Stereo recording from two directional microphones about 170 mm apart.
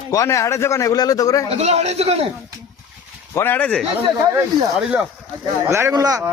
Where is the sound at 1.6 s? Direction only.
40° right (ahead or behind).